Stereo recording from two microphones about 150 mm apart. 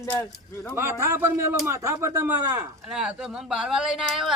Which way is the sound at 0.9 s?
20° right (ahead or behind).